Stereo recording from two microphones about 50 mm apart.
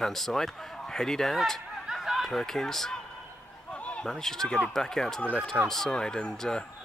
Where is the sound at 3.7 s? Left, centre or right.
Left.